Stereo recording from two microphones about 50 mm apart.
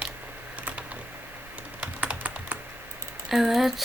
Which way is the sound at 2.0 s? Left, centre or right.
Right.